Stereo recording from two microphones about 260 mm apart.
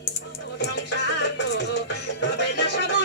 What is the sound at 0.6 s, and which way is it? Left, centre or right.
Music, left.